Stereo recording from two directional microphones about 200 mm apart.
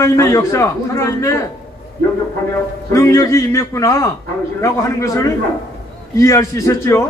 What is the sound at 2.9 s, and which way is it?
A man's voice, 15° left (ahead or behind).